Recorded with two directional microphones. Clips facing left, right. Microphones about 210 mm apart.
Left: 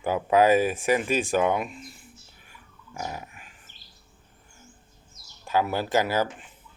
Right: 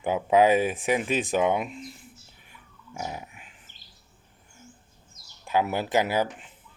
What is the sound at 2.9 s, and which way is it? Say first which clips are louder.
Dog: even; 10° right (ahead or behind).